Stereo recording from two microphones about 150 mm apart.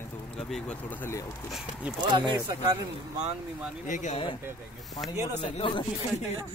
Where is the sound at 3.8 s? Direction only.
55° left (ahead or behind).